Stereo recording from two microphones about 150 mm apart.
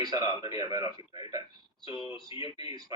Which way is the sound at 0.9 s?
40° left (ahead or behind).